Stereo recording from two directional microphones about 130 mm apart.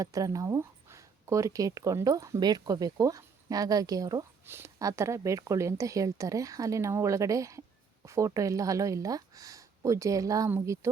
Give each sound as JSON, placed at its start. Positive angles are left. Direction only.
{"t": 0.0, "sound": "speech", "side_deg": -25}